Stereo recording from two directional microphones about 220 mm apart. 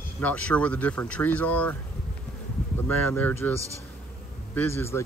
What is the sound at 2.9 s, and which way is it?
Speech, 10° left (ahead or behind).